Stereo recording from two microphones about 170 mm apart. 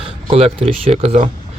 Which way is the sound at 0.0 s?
35° right (ahead or behind).